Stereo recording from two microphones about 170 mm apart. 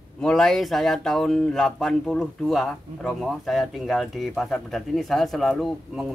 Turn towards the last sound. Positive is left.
turn(degrees=0)  # may be behind; listen again after turning